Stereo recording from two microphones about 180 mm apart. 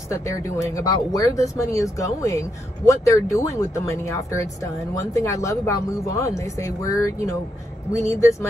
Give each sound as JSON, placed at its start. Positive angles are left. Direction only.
{"t": 0.1, "sound": "speech", "side_deg": 15}
{"t": 8.1, "sound": "speech", "side_deg": 15}